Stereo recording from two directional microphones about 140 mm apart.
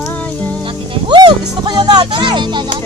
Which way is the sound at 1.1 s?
30° right (ahead or behind).